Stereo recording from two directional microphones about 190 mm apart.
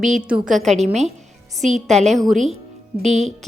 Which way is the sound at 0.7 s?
35° right (ahead or behind).